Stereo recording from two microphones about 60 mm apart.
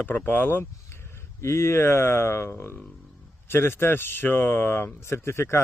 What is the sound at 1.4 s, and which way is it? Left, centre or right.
Speech, left.